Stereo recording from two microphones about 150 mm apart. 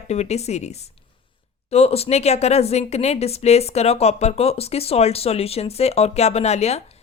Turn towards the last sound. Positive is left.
turn(degrees=45)  # may be behind; listen again after turning